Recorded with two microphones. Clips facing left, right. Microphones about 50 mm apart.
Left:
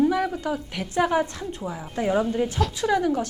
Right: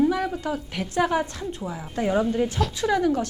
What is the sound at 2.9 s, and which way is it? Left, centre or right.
Speech, left.